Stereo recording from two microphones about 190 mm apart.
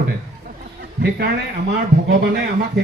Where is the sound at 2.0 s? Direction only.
65° right (ahead or behind).